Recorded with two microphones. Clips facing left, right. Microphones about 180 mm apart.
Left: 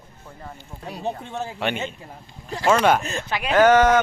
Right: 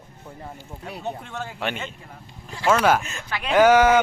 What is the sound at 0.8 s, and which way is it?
Speech, 25° left (ahead or behind).